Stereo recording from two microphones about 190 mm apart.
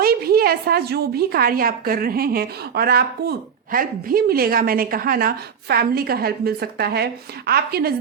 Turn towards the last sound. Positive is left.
turn(degrees=-55)  # may be behind; listen again after turning